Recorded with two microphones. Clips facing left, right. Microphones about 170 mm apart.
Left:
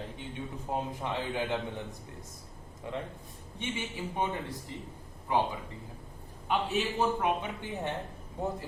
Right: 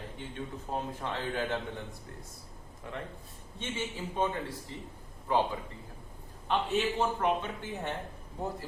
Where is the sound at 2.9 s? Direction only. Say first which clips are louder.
Left 3 dB; 20° left (ahead or behind).